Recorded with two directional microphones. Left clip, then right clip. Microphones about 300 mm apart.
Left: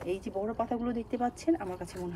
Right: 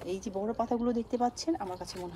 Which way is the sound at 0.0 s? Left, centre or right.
Right.